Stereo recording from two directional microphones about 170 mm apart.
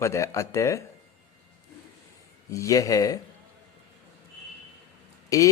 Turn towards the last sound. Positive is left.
turn(degrees=20)  # may be behind; listen again after turning